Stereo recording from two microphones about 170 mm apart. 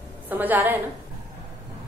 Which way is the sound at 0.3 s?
10° right (ahead or behind).